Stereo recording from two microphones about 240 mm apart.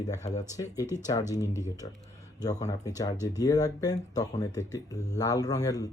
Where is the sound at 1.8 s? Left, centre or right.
Left.